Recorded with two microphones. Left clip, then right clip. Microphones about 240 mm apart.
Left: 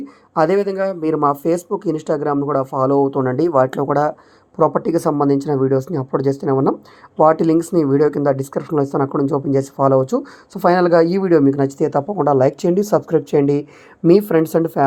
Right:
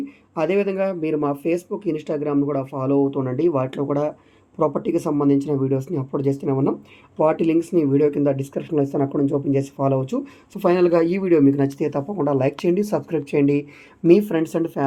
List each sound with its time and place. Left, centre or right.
0.3 s a man's voice: left